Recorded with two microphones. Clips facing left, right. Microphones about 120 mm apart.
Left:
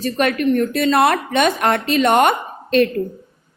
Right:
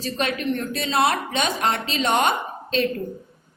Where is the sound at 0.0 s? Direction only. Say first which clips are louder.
Left 7 dB; 55° left (ahead or behind).